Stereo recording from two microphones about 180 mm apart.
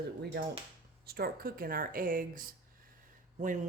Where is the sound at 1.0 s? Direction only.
60° right (ahead or behind).